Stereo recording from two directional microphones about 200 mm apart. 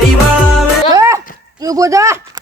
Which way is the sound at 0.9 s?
15° right (ahead or behind).